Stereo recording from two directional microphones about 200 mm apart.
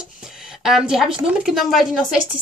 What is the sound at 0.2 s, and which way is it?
Speech, 5° right (ahead or behind).